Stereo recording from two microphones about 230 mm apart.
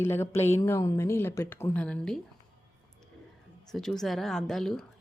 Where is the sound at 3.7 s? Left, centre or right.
Centre.